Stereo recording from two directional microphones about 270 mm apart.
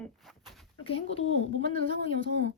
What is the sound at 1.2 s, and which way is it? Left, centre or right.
Speech, left.